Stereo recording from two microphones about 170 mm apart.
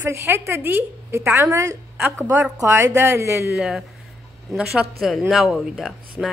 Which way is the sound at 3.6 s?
5° right (ahead or behind).